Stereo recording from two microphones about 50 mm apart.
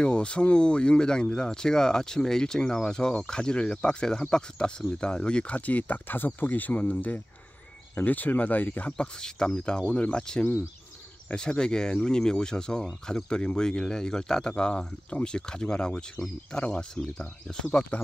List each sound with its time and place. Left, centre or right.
0.0 s speech: left
8.9 s speech: centre
16.2 s speech: left
16.5 s speech: centre